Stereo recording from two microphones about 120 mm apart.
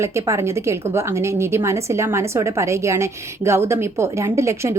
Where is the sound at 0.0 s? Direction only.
25° right (ahead or behind).